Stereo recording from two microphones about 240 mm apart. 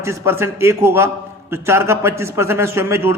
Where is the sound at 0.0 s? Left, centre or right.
Centre.